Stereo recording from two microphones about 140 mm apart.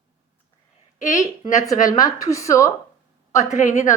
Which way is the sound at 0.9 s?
65° left (ahead or behind).